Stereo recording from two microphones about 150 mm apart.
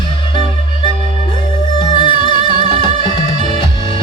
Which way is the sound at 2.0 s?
35° left (ahead or behind).